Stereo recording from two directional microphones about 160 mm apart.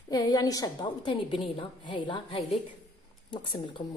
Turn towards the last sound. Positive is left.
turn(degrees=30)  # may be behind; listen again after turning